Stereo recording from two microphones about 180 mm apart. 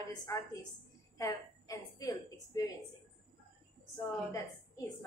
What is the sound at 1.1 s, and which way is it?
A woman's voice, 20° left (ahead or behind).